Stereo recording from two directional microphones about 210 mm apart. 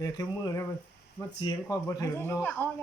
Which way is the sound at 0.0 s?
15° left (ahead or behind).